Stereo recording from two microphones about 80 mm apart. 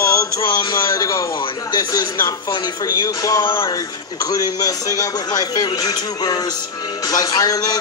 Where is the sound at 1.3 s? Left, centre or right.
Left.